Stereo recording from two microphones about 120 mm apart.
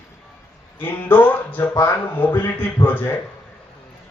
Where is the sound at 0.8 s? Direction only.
15° left (ahead or behind).